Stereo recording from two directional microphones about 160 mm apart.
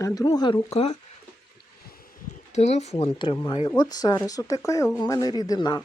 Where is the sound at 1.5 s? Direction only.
70° left (ahead or behind).